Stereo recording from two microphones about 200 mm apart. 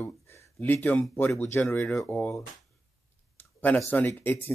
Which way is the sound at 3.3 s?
10° left (ahead or behind).